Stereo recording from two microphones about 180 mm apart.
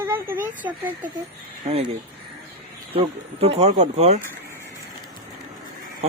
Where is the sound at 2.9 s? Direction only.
35° right (ahead or behind).